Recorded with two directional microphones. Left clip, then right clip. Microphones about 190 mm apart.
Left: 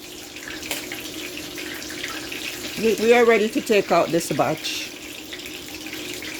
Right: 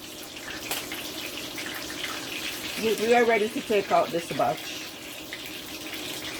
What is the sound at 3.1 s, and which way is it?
Speech, 65° left (ahead or behind).